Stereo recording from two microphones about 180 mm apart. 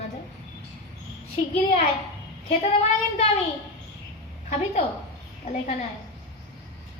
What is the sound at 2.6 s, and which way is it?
Speech, 35° left (ahead or behind).